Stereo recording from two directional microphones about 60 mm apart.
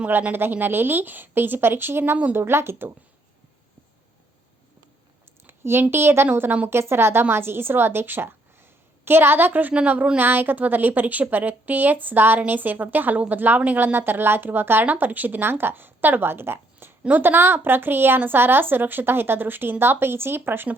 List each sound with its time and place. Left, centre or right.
0.1 s a woman's voice: right
5.5 s a sound: right
5.9 s a woman's voice: right
9.5 s a woman's voice: right